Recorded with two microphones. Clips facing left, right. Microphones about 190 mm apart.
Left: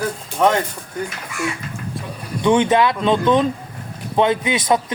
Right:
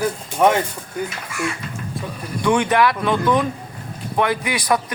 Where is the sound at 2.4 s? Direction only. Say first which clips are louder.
Left 2 dB; 20° left (ahead or behind).